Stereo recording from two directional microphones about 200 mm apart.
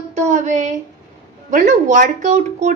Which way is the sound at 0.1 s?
35° right (ahead or behind).